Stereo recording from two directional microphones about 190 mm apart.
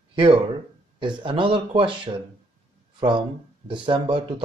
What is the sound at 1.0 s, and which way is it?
Speech, 25° right (ahead or behind).